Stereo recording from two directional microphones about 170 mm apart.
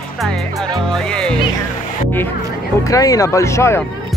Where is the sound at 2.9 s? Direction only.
20° left (ahead or behind).